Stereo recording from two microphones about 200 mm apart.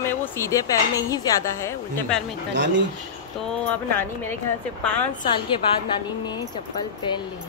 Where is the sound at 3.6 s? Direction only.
10° left (ahead or behind).